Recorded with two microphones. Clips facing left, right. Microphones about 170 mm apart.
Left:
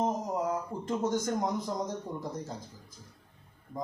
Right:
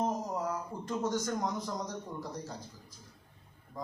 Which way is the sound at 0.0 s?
20° left (ahead or behind).